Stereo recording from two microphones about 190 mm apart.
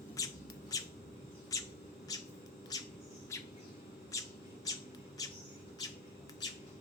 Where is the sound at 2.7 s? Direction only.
20° left (ahead or behind).